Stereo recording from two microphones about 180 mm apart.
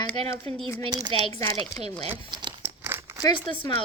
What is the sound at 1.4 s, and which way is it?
Speech, 15° left (ahead or behind).